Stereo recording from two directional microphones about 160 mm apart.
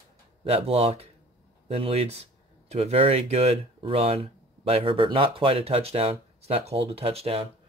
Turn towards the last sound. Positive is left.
turn(degrees=-35)  # may be behind; listen again after turning